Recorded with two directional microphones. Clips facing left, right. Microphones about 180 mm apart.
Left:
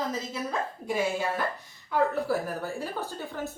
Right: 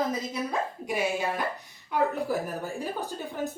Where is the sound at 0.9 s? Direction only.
15° right (ahead or behind).